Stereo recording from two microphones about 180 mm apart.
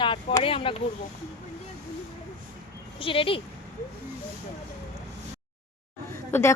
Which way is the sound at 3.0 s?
30° left (ahead or behind).